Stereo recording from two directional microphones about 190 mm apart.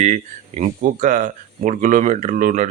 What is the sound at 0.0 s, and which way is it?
Speech, 40° right (ahead or behind).